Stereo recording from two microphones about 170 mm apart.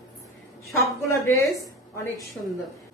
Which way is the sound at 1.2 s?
15° left (ahead or behind).